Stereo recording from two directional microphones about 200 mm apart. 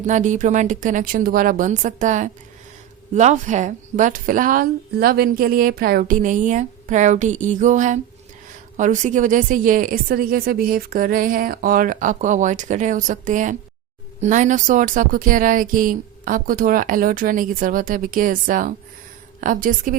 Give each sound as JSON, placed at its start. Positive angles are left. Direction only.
{"t": 0.0, "sound": "a woman's voice", "side_deg": -40}